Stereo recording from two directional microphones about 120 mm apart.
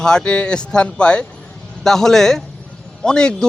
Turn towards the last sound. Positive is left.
turn(degrees=5)  # may be behind; listen again after turning